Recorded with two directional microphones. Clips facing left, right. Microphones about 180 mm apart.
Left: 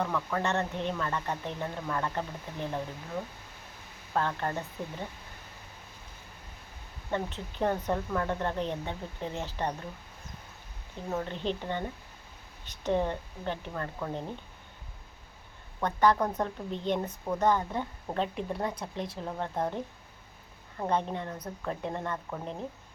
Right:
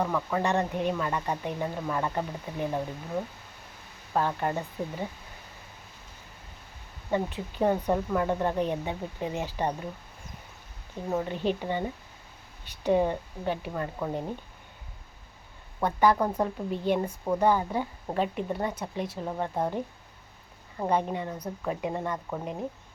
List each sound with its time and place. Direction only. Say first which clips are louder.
0.0 s speech: right 3 dB; 10° right (ahead or behind)
4.1 s speech: right 3 dB; 10° right (ahead or behind)
7.1 s speech: right 4 dB; 10° right (ahead or behind)
11.1 s speech: right 4 dB; 10° right (ahead or behind)
15.8 s speech: right 2 dB; 10° right (ahead or behind)